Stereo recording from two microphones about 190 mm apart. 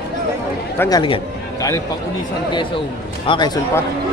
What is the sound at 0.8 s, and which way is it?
A man's voice, 20° left (ahead or behind).